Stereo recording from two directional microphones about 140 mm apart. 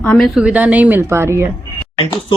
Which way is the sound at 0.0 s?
10° left (ahead or behind).